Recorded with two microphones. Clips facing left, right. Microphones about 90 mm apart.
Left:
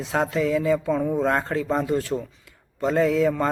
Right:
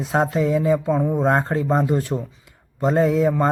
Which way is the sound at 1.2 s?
30° right (ahead or behind).